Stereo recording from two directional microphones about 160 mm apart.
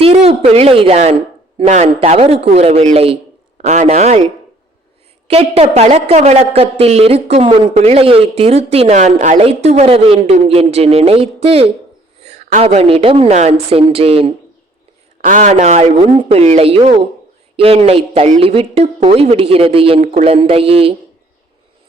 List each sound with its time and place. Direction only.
0.0 s a woman's voice: 40° right (ahead or behind)
5.3 s a woman's voice: 40° right (ahead or behind)
15.2 s a woman's voice: 50° right (ahead or behind)